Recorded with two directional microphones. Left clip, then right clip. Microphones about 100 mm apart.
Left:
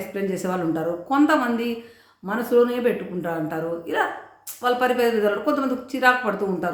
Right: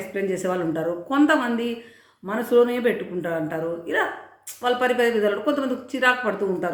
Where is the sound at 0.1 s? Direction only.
20° left (ahead or behind).